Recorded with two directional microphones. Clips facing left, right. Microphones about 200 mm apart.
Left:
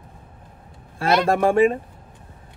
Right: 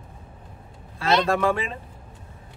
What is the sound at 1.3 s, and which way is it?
Speech, 45° left (ahead or behind).